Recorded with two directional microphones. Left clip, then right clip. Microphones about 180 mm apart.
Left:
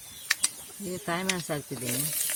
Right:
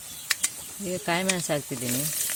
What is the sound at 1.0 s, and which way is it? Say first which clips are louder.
Speech: right 4 dB; 35° right (ahead or behind).